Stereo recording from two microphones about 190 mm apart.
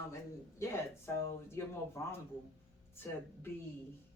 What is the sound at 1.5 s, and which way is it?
Speech, 15° left (ahead or behind).